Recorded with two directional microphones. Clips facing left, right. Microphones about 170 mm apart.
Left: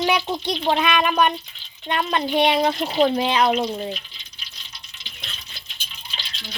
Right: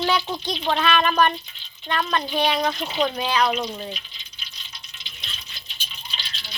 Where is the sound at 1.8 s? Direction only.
20° left (ahead or behind).